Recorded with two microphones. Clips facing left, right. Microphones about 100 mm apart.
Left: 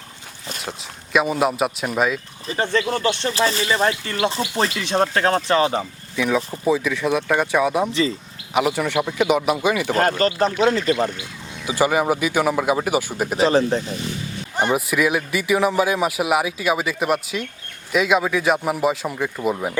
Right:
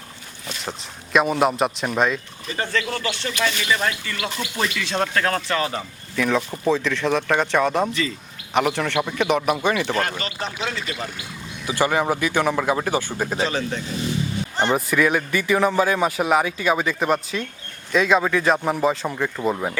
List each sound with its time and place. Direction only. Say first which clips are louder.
1.1 s a man's voice: right 1 dB; centre (ahead or behind)
2.5 s speech: left 4 dB; 25° left (ahead or behind)
3.2 s speech: left 3 dB; 35° left (ahead or behind)
6.1 s speech: left 1 dB; 10° left (ahead or behind)
9.9 s speech: left 6 dB; 40° left (ahead or behind)
11.6 s speech: left 2 dB; 15° left (ahead or behind)
13.4 s speech: left 11 dB; 35° left (ahead or behind)
14.5 s speech: left 1 dB; 10° left (ahead or behind)